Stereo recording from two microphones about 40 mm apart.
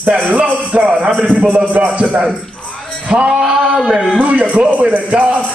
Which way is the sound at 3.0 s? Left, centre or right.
Right.